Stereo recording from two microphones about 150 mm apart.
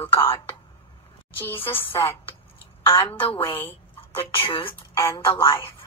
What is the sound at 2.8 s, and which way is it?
A woman's voice, 35° left (ahead or behind).